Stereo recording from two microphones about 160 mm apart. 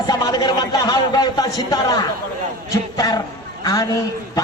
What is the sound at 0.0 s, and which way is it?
A man's voice, 25° left (ahead or behind).